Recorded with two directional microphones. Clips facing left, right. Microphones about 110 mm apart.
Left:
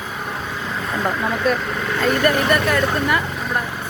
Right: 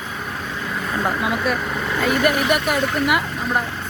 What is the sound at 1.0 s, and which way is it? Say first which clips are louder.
Speech: left 2 dB; 5° right (ahead or behind).